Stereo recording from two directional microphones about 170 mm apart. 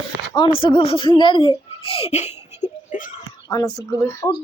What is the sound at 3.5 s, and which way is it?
Speech, 20° left (ahead or behind).